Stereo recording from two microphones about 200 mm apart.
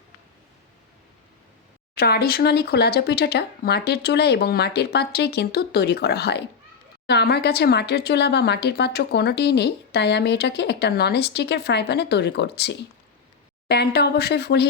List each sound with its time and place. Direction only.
2.0 s speech: 50° left (ahead or behind)